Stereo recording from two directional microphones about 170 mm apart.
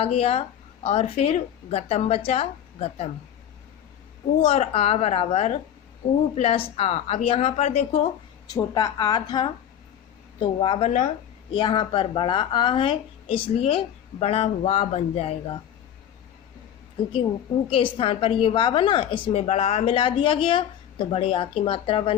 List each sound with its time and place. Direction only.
0.0 s a woman's voice: 35° left (ahead or behind)
4.4 s a woman's voice: 35° left (ahead or behind)
8.5 s a woman's voice: 20° left (ahead or behind); by 11.1 s 40° left (ahead or behind)
11.5 s a woman's voice: 30° left (ahead or behind)
17.7 s a woman's voice: 30° left (ahead or behind)